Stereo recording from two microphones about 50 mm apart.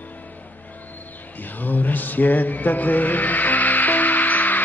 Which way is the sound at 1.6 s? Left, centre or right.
Left.